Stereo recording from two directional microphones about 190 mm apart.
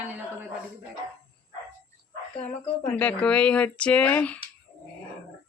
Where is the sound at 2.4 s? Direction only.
5° left (ahead or behind).